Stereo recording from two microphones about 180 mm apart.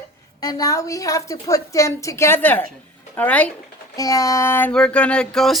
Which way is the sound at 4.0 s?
20° left (ahead or behind).